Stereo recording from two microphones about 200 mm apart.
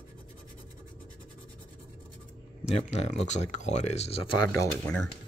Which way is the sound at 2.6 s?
35° left (ahead or behind).